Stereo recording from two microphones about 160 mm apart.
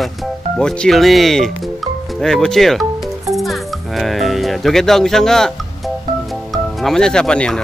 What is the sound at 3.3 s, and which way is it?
Music, centre (ahead or behind).